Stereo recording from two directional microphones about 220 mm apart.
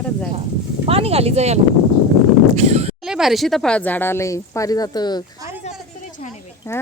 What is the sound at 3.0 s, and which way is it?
Speech, centre (ahead or behind).